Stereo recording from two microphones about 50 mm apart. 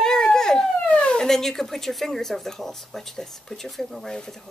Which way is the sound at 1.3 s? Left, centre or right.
Centre.